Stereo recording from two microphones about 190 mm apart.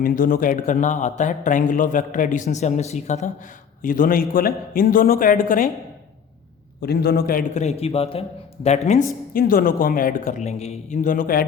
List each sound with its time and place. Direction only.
0.0 s a man's voice: 45° left (ahead or behind)
6.8 s a man's voice: 55° left (ahead or behind); by 9.0 s 35° left (ahead or behind)
9.3 s a man's voice: 50° left (ahead or behind)